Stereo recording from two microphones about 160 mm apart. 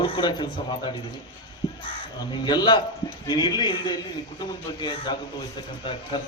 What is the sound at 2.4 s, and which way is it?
A man's voice, 25° left (ahead or behind).